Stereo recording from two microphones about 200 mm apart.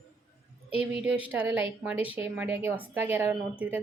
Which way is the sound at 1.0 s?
5° right (ahead or behind).